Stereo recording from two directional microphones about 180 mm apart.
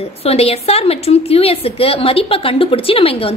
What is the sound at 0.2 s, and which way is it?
A woman's voice, 35° left (ahead or behind).